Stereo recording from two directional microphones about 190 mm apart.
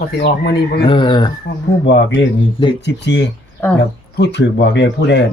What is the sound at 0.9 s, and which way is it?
Speech, 25° left (ahead or behind).